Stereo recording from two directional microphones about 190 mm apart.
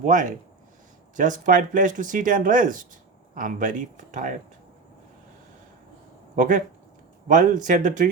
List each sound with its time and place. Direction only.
0.0 s speech: 40° right (ahead or behind)
6.3 s speech: 40° right (ahead or behind)